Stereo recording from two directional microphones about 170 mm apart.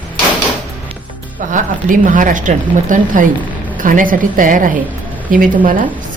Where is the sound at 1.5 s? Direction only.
50° right (ahead or behind).